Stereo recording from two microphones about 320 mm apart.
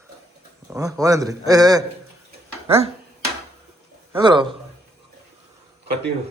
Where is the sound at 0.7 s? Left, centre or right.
Centre.